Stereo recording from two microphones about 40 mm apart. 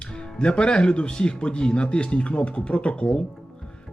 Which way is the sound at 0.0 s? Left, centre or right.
Left.